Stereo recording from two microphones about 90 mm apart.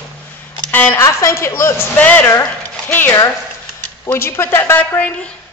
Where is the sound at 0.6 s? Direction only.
15° left (ahead or behind).